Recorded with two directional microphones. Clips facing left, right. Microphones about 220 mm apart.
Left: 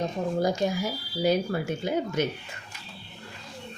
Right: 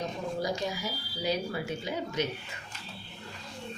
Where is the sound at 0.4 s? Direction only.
50° left (ahead or behind).